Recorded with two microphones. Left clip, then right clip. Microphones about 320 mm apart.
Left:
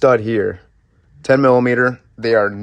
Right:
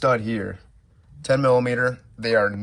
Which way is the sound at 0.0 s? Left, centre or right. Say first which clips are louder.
Left 8 dB; left.